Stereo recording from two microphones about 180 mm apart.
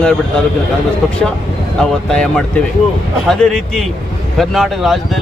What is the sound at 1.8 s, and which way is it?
Speech, 5° left (ahead or behind).